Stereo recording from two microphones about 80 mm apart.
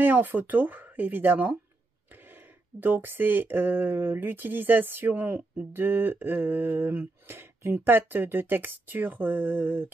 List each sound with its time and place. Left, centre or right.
0.0 s speech: right
2.8 s speech: right